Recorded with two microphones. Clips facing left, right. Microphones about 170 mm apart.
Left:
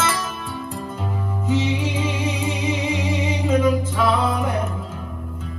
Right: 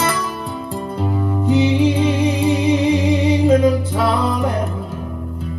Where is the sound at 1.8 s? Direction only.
35° right (ahead or behind).